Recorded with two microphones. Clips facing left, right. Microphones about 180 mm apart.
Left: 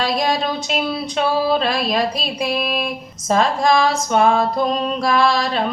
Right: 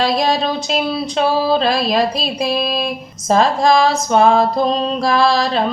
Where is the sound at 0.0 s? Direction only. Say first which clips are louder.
Right 3 dB; 35° right (ahead or behind).